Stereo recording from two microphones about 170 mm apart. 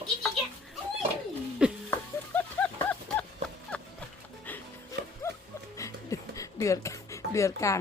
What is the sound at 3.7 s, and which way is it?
Clip-clop, 5° left (ahead or behind).